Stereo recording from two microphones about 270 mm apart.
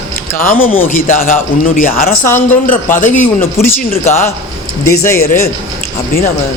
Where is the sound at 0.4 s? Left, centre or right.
Left.